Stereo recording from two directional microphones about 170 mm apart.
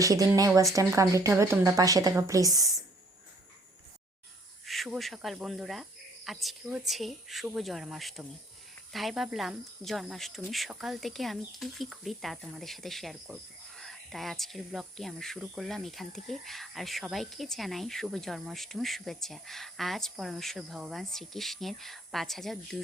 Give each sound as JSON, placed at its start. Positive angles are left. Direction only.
{"t": 0.0, "sound": "a woman's voice", "side_deg": -20}
{"t": 4.6, "sound": "speech", "side_deg": 0}